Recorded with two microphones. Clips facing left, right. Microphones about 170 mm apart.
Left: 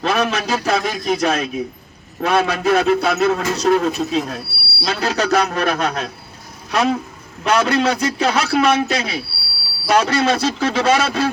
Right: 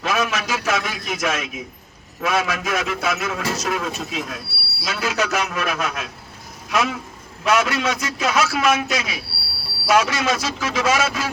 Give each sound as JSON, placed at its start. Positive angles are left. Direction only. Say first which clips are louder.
{"t": 0.0, "sound": "a man's voice", "louder": "left 4 dB", "side_deg": 35}